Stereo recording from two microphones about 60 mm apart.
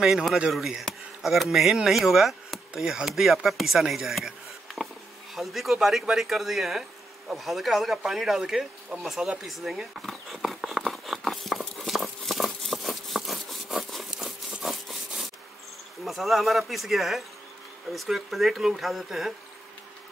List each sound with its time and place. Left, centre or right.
0.0 s speech: centre
4.8 s bee: centre
5.3 s speech: centre
11.1 s a sound: centre
14.1 s a sound: centre
14.6 s wood: centre
16.0 s speech: centre